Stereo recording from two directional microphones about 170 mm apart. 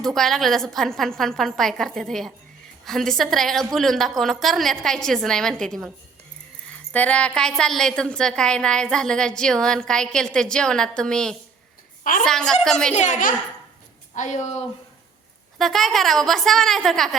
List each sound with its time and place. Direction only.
0.0 s a woman's voice: centre (ahead or behind)
12.9 s a child's voice: 45° left (ahead or behind)
15.5 s a woman's voice: centre (ahead or behind)